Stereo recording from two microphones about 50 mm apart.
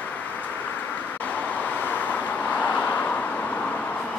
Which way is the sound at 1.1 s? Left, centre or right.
Left.